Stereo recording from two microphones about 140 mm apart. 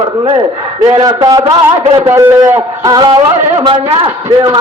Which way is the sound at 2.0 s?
15° right (ahead or behind).